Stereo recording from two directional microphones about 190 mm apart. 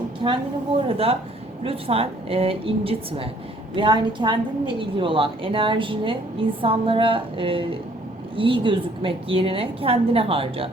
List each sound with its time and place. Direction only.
0.2 s a woman's voice: 25° right (ahead or behind)